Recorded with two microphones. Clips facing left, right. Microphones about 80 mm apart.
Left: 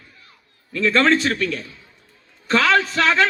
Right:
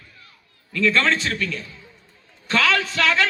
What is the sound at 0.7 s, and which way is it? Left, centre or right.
A woman's voice, left.